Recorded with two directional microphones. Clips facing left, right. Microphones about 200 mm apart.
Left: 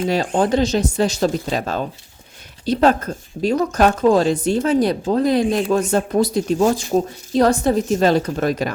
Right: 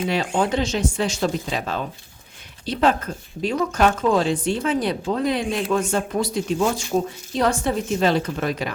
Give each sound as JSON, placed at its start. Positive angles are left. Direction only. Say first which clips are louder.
{"t": 0.1, "sound": "speech", "louder": "left 5 dB", "side_deg": 40}